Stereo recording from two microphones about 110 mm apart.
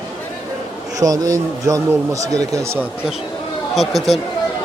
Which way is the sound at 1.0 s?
30° right (ahead or behind).